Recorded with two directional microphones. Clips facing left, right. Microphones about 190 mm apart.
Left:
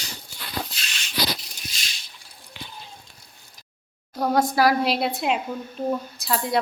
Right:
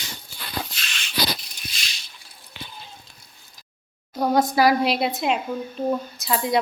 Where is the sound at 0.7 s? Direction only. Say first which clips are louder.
Right 1 dB; 35° left (ahead or behind).